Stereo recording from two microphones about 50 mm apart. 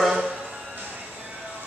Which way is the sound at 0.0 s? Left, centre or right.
Centre.